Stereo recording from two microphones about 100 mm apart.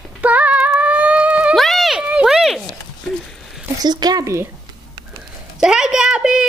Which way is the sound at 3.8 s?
45° right (ahead or behind).